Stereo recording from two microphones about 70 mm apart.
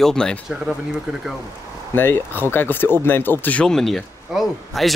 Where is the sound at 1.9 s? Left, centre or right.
Left.